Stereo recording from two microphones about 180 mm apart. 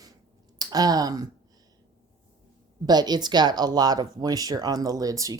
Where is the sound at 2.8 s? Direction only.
20° right (ahead or behind).